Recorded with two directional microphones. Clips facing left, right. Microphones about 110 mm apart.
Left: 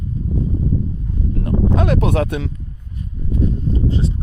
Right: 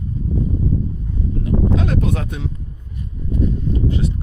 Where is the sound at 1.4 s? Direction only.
60° left (ahead or behind).